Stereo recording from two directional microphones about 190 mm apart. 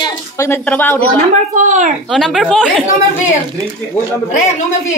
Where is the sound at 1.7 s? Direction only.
40° right (ahead or behind).